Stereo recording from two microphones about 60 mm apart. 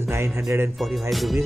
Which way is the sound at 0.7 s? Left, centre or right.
Centre.